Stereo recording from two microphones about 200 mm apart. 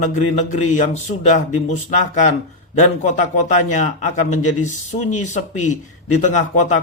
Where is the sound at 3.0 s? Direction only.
35° left (ahead or behind).